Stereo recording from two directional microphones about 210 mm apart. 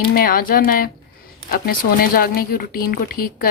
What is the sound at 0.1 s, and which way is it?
A woman's voice, 45° left (ahead or behind).